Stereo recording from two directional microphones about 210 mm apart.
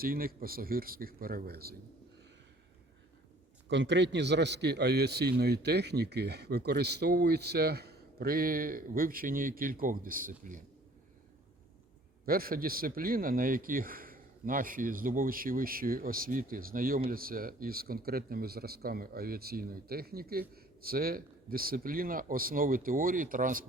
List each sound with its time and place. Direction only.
0.0 s a man's voice: 45° right (ahead or behind)
3.7 s a man's voice: 55° right (ahead or behind); by 10.6 s 40° right (ahead or behind)
12.2 s a man's voice: 45° right (ahead or behind)